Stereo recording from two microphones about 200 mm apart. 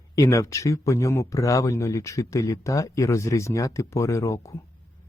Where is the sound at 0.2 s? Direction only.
15° left (ahead or behind).